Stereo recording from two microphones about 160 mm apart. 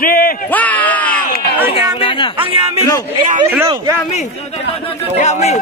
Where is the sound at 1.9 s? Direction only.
30° left (ahead or behind).